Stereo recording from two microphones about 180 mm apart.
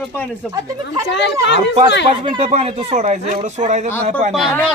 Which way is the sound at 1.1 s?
75° left (ahead or behind).